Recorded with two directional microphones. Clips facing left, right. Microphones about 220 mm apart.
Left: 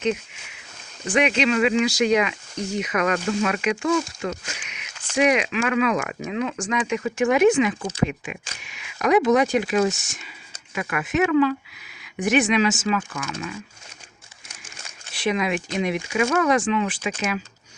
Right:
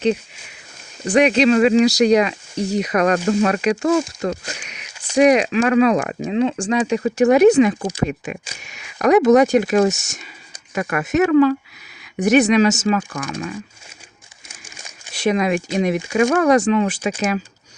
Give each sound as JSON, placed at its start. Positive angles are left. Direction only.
{"t": 1.0, "sound": "speech", "side_deg": -40}
{"t": 15.1, "sound": "speech", "side_deg": -40}